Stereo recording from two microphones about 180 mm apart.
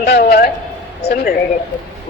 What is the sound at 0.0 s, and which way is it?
A man's voice, 65° left (ahead or behind).